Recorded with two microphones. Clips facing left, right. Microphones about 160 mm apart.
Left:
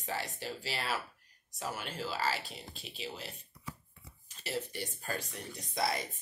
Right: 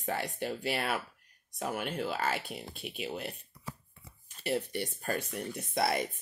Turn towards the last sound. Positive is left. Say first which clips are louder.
# right 4 dB
turn(degrees=-60)  # may be behind; listen again after turning